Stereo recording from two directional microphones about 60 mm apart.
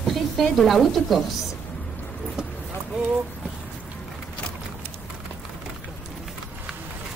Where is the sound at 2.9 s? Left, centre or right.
Centre.